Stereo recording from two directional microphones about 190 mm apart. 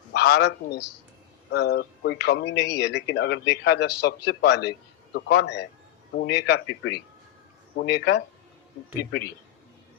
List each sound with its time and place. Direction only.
0.1 s a man's voice: 60° left (ahead or behind)